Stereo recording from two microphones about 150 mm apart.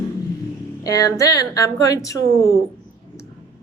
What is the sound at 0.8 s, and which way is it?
A woman's voice, 25° left (ahead or behind).